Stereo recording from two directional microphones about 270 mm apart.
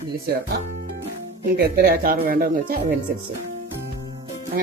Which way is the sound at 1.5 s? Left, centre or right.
Right.